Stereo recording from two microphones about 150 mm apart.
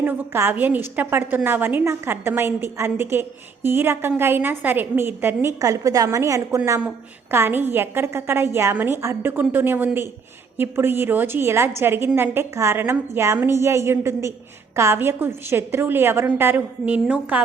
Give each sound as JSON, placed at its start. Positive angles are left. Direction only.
{"t": 0.0, "sound": "a woman's voice", "side_deg": -15}